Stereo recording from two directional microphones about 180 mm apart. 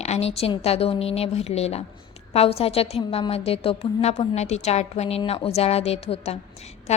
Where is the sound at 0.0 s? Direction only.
35° left (ahead or behind).